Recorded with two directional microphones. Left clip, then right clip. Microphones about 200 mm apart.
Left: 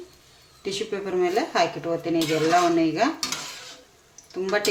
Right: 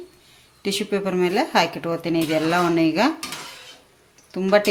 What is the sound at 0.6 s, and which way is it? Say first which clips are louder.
Speech: right 5 dB; 55° right (ahead or behind).